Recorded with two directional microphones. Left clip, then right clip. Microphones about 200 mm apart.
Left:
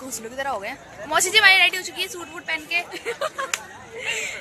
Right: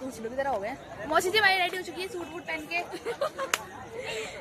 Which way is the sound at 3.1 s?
20° left (ahead or behind).